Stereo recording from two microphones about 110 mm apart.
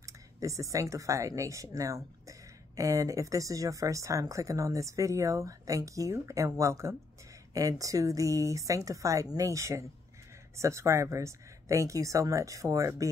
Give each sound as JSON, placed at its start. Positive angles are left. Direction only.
{"t": 0.0, "sound": "speech", "side_deg": -30}